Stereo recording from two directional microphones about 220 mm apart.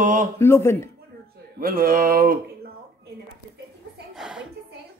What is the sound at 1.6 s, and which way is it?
Speech, 40° right (ahead or behind).